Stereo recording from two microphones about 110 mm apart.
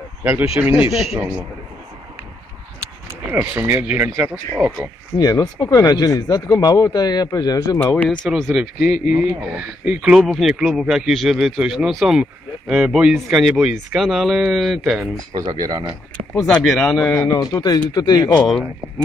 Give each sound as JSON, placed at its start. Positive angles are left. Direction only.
{"t": 0.2, "sound": "speech", "side_deg": -20}
{"t": 3.3, "sound": "speech", "side_deg": -20}
{"t": 5.2, "sound": "speech", "side_deg": 35}
{"t": 7.8, "sound": "speech", "side_deg": 15}
{"t": 8.3, "sound": "speech", "side_deg": 0}
{"t": 15.5, "sound": "speech", "side_deg": -35}
{"t": 16.4, "sound": "speech", "side_deg": 5}
{"t": 17.3, "sound": "speech", "side_deg": 30}
{"t": 18.4, "sound": "speech", "side_deg": 0}